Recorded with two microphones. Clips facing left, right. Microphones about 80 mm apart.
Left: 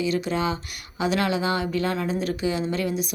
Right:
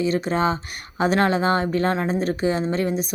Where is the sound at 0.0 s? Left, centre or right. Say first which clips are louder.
Right 3 dB; right.